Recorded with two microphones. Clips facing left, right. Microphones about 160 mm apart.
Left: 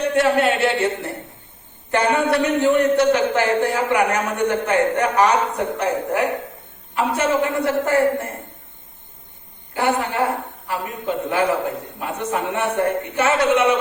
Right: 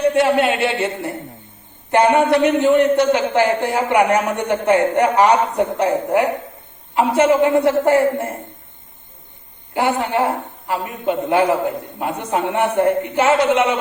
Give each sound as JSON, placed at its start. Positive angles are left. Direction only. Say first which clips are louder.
{"t": 0.2, "sound": "a man's voice", "louder": "right 1 dB", "side_deg": -20}
{"t": 9.7, "sound": "a man's voice", "louder": "right 2 dB", "side_deg": -20}